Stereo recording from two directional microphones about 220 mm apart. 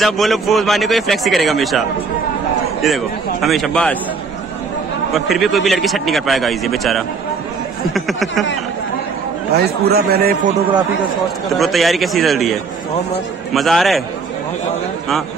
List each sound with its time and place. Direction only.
0.0 s a man's voice: centre (ahead or behind)
3.4 s a man's voice: centre (ahead or behind)
5.1 s a man's voice: centre (ahead or behind)
9.6 s speech: 45° right (ahead or behind)
11.4 s a man's voice: centre (ahead or behind)